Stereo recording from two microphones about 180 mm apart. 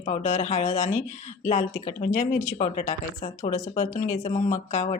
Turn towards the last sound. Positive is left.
turn(degrees=40)  # may be behind; listen again after turning